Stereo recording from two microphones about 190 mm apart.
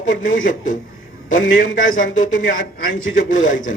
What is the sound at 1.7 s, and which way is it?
Speech, 90° left.